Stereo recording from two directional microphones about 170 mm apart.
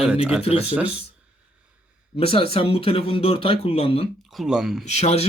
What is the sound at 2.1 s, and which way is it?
Speech, 35° left (ahead or behind).